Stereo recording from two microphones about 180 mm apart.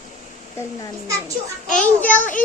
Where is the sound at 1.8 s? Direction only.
10° left (ahead or behind).